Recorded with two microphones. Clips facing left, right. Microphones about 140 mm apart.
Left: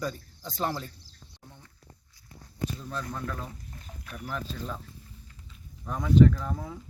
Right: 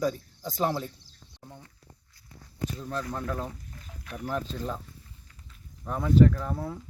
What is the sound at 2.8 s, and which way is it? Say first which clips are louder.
Speech: right 3 dB; 15° right (ahead or behind).